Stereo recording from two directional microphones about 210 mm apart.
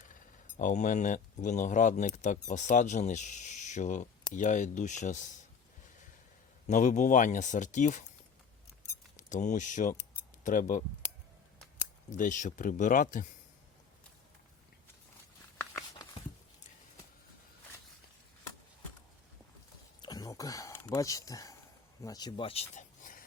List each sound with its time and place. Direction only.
0.0 s speech: 40° left (ahead or behind)
6.7 s speech: 35° left (ahead or behind)
9.1 s speech: 35° left (ahead or behind)
12.1 s speech: 40° left (ahead or behind)
15.5 s a sound: 10° left (ahead or behind)
20.0 s a sound: 20° left (ahead or behind)
22.0 s speech: 20° left (ahead or behind); by 23.2 s 40° left (ahead or behind)